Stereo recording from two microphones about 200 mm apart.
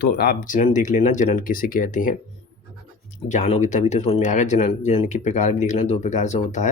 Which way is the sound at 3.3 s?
35° left (ahead or behind).